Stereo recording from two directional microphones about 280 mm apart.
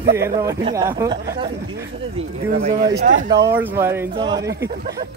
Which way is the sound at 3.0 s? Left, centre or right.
Right.